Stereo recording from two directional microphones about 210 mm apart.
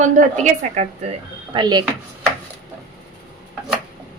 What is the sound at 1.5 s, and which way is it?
Speech, 20° right (ahead or behind).